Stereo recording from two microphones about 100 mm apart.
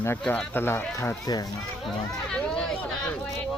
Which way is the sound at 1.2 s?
40° left (ahead or behind).